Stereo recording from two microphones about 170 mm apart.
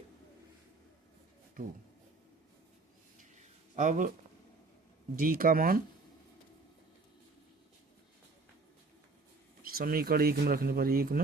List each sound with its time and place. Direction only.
1.6 s speech: 55° right (ahead or behind)
3.3 s a sound: 45° right (ahead or behind)
5.1 s speech: 55° right (ahead or behind)
9.6 s speech: 60° right (ahead or behind)